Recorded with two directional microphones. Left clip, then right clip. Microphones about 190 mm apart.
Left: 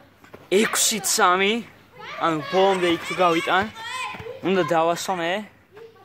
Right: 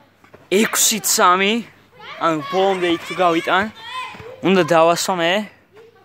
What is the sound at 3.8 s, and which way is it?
Children playing, 25° right (ahead or behind).